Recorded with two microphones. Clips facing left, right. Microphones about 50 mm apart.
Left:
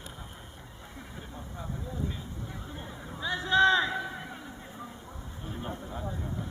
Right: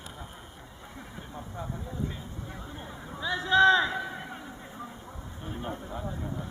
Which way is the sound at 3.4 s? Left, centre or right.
Right.